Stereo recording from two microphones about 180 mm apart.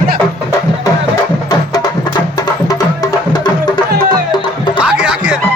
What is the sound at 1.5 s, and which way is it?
Music, 20° left (ahead or behind).